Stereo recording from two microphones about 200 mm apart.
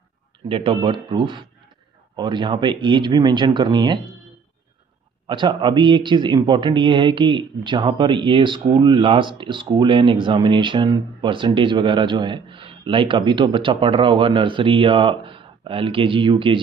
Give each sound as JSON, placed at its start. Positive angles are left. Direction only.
{"t": 0.5, "sound": "a man's voice", "side_deg": -25}
{"t": 5.2, "sound": "a man's voice", "side_deg": -25}